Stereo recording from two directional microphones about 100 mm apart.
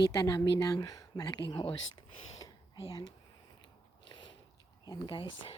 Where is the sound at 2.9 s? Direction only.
45° left (ahead or behind).